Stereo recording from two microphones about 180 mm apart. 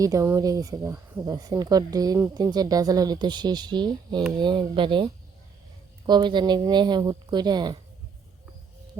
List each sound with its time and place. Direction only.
0.0 s speech: 15° right (ahead or behind)
6.1 s speech: 25° right (ahead or behind)